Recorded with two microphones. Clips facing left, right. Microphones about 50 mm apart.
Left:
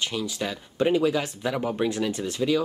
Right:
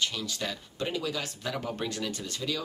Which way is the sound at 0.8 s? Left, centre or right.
Left.